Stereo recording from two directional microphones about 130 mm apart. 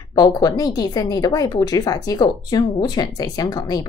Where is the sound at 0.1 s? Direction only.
30° left (ahead or behind).